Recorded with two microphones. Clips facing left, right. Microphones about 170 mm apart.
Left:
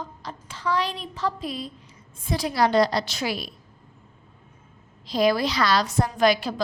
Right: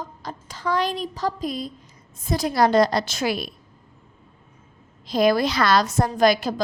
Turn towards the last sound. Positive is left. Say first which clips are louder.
# right 2 dB
turn(degrees=-40)  # may be behind; listen again after turning